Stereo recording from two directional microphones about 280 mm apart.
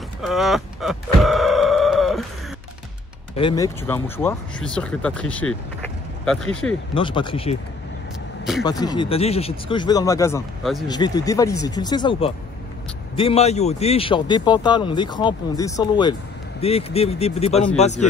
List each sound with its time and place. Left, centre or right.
0.2 s a sound: centre
3.3 s speech: centre
6.9 s a man's voice: centre
8.6 s a man's voice: centre
10.6 s speech: centre
10.9 s a man's voice: centre